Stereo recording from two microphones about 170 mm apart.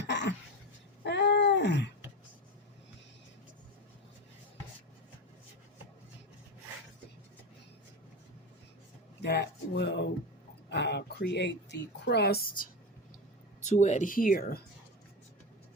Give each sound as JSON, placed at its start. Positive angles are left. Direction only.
{"t": 0.0, "sound": "throat clearing", "side_deg": 90}
{"t": 1.0, "sound": "wail", "side_deg": 80}
{"t": 9.2, "sound": "a sound", "side_deg": 75}
{"t": 10.7, "sound": "speech", "side_deg": 85}
{"t": 13.7, "sound": "speech", "side_deg": 45}